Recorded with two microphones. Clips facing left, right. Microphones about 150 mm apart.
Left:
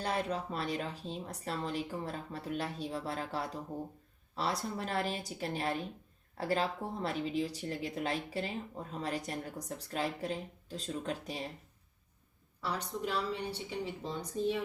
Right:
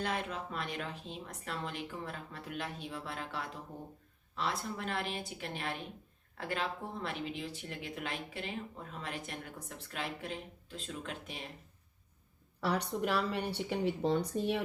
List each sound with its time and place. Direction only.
0.0 s speech: 35° left (ahead or behind)
12.5 s speech: 65° right (ahead or behind)